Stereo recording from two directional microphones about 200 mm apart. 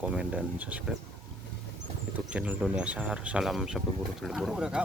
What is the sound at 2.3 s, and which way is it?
Speech, 5° right (ahead or behind).